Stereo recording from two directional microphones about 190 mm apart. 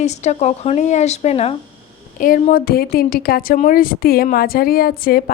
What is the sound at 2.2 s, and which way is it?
A woman's voice, 45° left (ahead or behind).